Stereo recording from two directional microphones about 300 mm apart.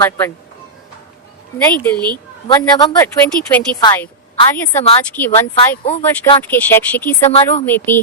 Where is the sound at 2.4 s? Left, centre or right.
Centre.